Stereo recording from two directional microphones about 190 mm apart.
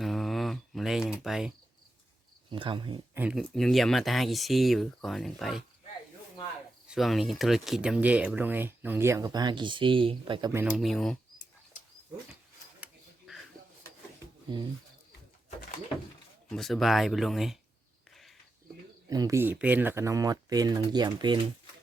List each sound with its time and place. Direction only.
0.0 s a sound: centre (ahead or behind)
1.2 s speech: centre (ahead or behind)
2.5 s speech: 25° right (ahead or behind)
3.2 s speech: 5° right (ahead or behind)
6.8 s speech: centre (ahead or behind); by 10.5 s 25° right (ahead or behind)
10.5 s speech: 10° right (ahead or behind)
10.8 s speech: centre (ahead or behind)
12.8 s a sound: centre (ahead or behind)
14.5 s speech: 25° right (ahead or behind)
16.5 s speech: centre (ahead or behind)
18.1 s a sound: centre (ahead or behind)
19.0 s speech: 20° right (ahead or behind)